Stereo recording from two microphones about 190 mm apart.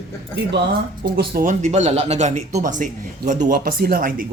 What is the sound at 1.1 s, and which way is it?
Speech, 55° right (ahead or behind).